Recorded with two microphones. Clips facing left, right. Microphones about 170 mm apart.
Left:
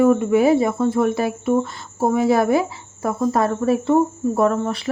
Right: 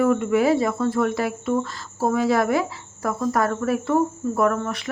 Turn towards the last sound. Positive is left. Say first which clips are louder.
# left 3 dB
turn(degrees=30)  # may be behind; listen again after turning